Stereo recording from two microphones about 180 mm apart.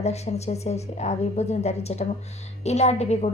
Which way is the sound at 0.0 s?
35° left (ahead or behind).